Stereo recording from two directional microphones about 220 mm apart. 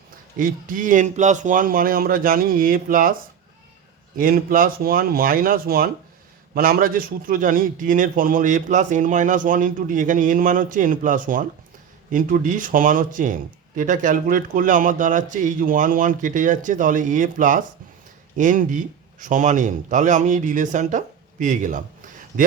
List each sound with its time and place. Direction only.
0.3 s speech: 40° right (ahead or behind)
4.2 s speech: 40° right (ahead or behind)